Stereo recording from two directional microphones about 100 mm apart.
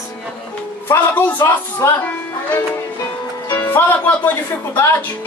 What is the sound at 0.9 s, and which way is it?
Speech, 20° left (ahead or behind).